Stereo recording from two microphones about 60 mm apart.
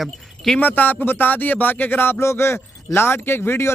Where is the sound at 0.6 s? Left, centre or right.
Left.